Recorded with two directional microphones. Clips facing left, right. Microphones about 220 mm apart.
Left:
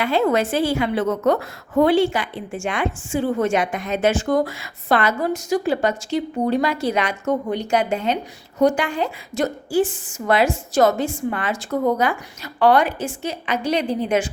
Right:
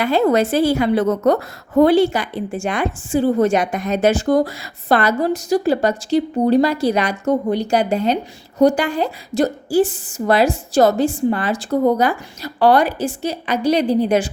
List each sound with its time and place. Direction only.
0.0 s a woman's voice: 40° right (ahead or behind)